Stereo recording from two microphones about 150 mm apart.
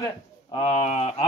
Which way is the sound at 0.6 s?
45° left (ahead or behind).